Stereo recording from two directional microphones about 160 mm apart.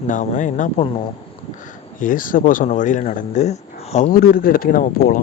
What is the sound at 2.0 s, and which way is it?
Speech, 55° left (ahead or behind).